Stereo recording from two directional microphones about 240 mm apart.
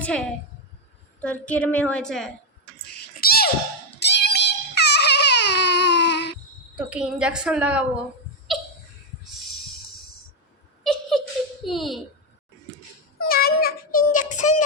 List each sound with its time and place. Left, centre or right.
0.0 s a woman's voice: centre
2.8 s cat: left
3.9 s a sound: left
6.7 s a woman's voice: centre
11.6 s a sound: centre
13.1 s child singing: left